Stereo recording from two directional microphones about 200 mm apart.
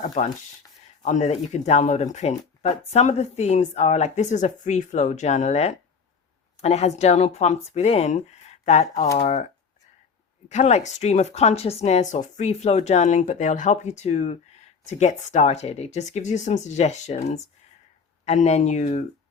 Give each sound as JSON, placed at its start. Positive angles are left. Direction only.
{"t": 0.2, "sound": "speech", "side_deg": 35}
{"t": 10.5, "sound": "speech", "side_deg": 35}